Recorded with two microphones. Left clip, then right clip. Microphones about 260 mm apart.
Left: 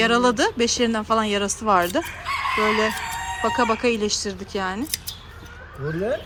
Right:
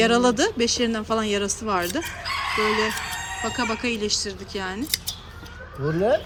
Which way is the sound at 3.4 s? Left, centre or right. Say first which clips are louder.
Left 6 dB; centre.